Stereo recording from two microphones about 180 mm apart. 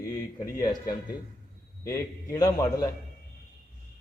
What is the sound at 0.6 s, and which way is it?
A man's voice, 20° left (ahead or behind).